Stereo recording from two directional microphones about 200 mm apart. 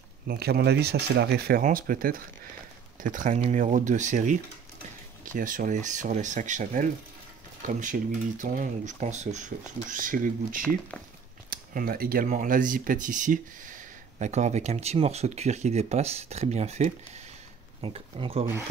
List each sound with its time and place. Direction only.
0.3 s speech: 50° right (ahead or behind)
1.6 s speech: 45° right (ahead or behind); by 18.4 s 30° right (ahead or behind)